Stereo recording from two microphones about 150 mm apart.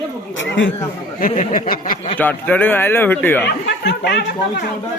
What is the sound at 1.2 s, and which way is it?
Speech, 55° left (ahead or behind).